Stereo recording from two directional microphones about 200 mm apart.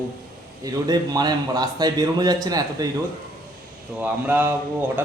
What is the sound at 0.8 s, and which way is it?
A man's voice, 20° right (ahead or behind).